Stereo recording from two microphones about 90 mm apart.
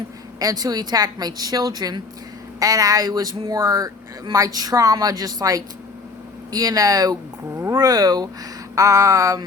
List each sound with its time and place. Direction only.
0.3 s speech: 45° right (ahead or behind)
7.5 s speech: 35° right (ahead or behind)